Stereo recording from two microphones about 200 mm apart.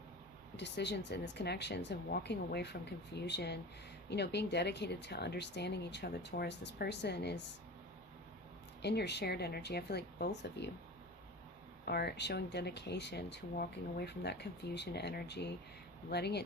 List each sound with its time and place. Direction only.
0.5 s speech: 60° left (ahead or behind)
8.8 s speech: 55° left (ahead or behind)
11.9 s speech: 55° left (ahead or behind)